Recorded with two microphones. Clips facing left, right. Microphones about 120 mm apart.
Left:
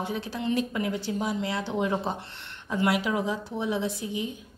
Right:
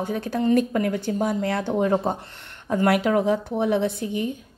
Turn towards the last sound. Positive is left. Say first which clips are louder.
# right 6 dB
turn(degrees=-55)  # may be behind; listen again after turning